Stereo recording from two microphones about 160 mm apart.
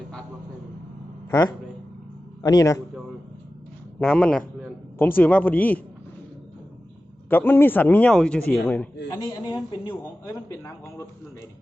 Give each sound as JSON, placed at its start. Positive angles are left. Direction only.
{"t": 1.3, "sound": "speech", "side_deg": 20}
{"t": 4.0, "sound": "speech", "side_deg": 5}
{"t": 7.3, "sound": "speech", "side_deg": 10}
{"t": 9.3, "sound": "speech", "side_deg": 30}
{"t": 10.6, "sound": "speech", "side_deg": 15}